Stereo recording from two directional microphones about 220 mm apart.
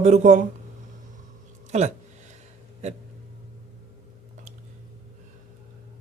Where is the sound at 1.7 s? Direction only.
30° right (ahead or behind).